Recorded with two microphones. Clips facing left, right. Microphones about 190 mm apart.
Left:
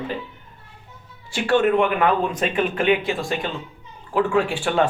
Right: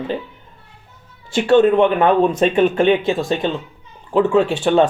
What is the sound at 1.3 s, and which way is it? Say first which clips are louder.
Speech: right 6 dB; 20° right (ahead or behind).